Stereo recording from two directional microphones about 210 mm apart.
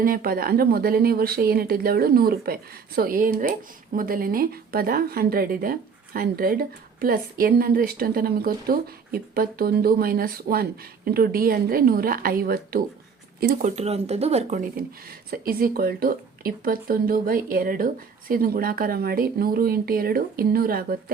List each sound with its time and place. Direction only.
0.0 s a woman's voice: 45° right (ahead or behind)
15.3 s a woman's voice: 45° right (ahead or behind)